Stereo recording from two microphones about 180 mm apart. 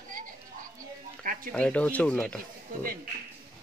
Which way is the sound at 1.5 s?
5° left (ahead or behind).